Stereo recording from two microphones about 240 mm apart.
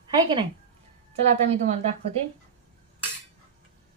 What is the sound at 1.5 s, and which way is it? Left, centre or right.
Speech, right.